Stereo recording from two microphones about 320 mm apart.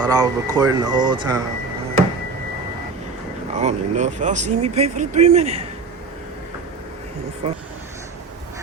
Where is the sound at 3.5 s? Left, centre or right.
Right.